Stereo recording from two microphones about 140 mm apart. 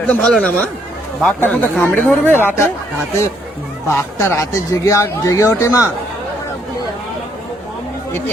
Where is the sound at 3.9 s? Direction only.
20° left (ahead or behind).